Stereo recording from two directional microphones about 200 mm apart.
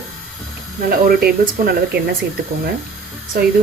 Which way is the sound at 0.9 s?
50° right (ahead or behind).